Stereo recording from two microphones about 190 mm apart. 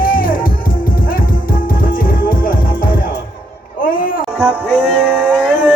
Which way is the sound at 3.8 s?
50° left (ahead or behind).